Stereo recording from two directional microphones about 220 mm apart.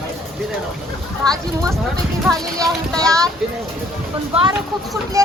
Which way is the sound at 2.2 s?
Centre (ahead or behind).